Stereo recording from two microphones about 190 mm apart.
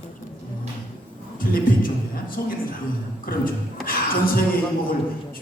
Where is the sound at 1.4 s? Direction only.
50° left (ahead or behind).